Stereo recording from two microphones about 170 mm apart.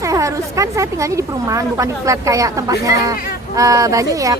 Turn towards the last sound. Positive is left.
turn(degrees=-20)  # may be behind; listen again after turning